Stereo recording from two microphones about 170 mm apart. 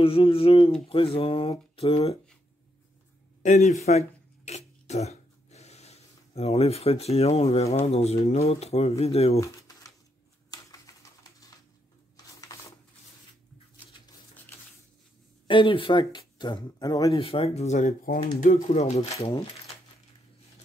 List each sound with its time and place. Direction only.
0.0 s speech: 35° left (ahead or behind)
3.4 s speech: 40° left (ahead or behind)
4.5 s throat clearing: 40° left (ahead or behind)
10.5 s a sound: 20° left (ahead or behind)
15.4 s speech: 30° left (ahead or behind)
17.1 s speech: 35° left (ahead or behind)